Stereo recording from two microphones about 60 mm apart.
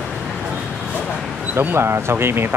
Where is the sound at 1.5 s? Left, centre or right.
Right.